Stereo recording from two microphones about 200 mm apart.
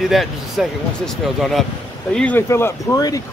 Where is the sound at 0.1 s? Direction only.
Centre (ahead or behind).